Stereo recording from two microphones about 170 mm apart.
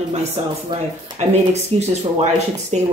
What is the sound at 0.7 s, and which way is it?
Speech, 30° right (ahead or behind).